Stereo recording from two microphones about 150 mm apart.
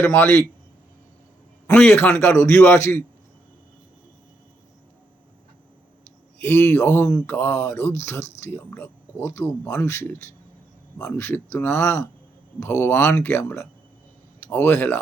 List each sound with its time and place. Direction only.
0.0 s speech: 15° left (ahead or behind)
1.7 s speech: 10° left (ahead or behind)
6.4 s speech: 15° left (ahead or behind)